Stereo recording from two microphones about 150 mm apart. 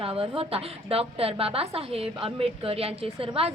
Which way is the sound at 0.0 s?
40° right (ahead or behind).